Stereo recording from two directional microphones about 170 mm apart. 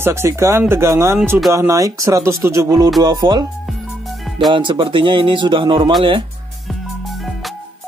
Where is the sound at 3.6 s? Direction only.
Centre (ahead or behind).